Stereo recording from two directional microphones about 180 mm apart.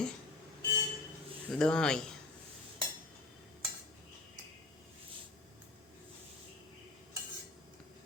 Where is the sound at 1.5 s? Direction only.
5° left (ahead or behind).